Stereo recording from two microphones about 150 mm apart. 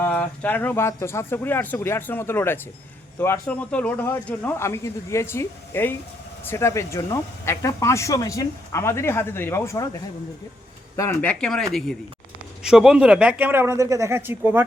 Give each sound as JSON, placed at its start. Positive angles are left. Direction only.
{"t": 0.0, "sound": "speech", "side_deg": 10}
{"t": 10.9, "sound": "speech", "side_deg": 15}